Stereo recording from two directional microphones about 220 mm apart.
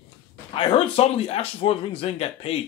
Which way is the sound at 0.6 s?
25° left (ahead or behind).